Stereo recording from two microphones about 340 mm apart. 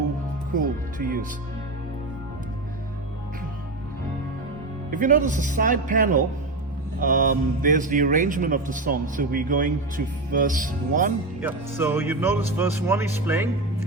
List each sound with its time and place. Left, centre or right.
0.6 s music: right
4.9 s a man's voice: right
11.3 s speech: centre